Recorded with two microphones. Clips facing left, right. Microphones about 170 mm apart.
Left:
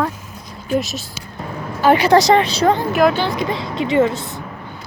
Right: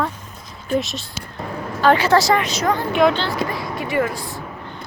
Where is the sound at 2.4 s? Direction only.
30° left (ahead or behind).